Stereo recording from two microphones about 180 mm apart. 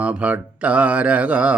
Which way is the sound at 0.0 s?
5° right (ahead or behind).